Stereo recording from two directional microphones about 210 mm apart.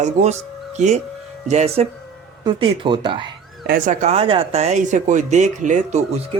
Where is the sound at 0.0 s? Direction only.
35° right (ahead or behind).